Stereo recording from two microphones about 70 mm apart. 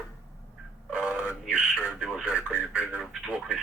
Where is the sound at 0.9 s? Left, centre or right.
Centre.